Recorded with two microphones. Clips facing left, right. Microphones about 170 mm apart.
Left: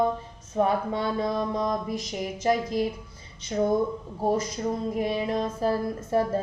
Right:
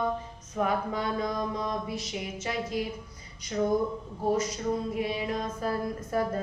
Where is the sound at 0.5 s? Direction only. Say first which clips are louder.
Left 4 dB; 30° left (ahead or behind).